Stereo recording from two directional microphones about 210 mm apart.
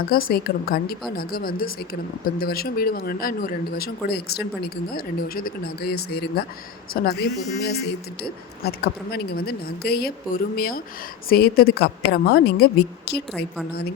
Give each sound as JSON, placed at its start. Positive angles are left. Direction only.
{"t": 0.1, "sound": "speech", "side_deg": 45}